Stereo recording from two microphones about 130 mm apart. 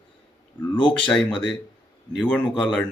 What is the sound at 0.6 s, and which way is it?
Speech, 35° left (ahead or behind).